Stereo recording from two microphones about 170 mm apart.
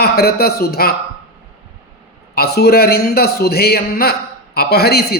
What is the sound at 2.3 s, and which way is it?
A man's voice, 70° left (ahead or behind).